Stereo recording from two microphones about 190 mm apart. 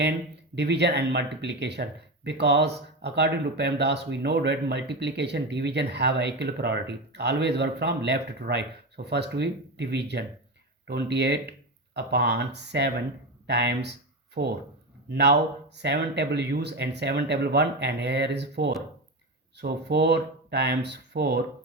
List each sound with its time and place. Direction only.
0.5 s speech: 65° right (ahead or behind)
14.4 s speech: 50° right (ahead or behind)
15.1 s speech: 65° right (ahead or behind)